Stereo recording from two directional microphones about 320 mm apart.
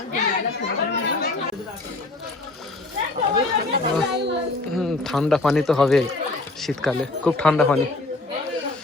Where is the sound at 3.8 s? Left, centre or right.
Right.